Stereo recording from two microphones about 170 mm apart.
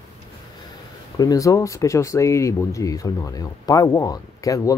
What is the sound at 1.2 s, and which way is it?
Speech, 20° left (ahead or behind).